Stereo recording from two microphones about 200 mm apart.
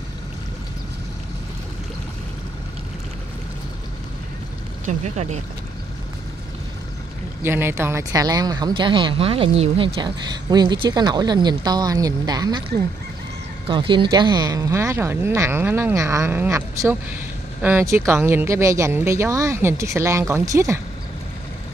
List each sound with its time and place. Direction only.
4.8 s speech: 35° right (ahead or behind)
7.4 s speech: 10° right (ahead or behind)